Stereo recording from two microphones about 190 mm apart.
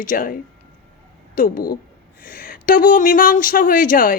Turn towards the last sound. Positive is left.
turn(degrees=45)  # may be behind; listen again after turning